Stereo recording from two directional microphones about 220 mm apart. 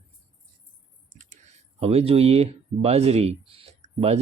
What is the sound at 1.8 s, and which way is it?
Speech, 25° right (ahead or behind).